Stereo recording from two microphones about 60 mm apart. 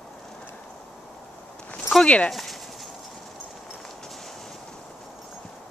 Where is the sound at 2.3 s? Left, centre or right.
Centre.